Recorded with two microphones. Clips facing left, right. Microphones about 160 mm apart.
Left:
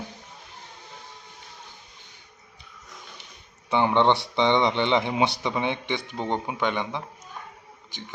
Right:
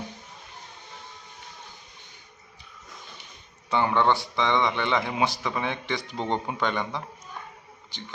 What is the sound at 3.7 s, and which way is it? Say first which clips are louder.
Speech: left 2 dB; 20° left (ahead or behind).